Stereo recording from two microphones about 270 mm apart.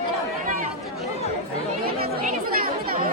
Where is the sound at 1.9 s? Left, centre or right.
Right.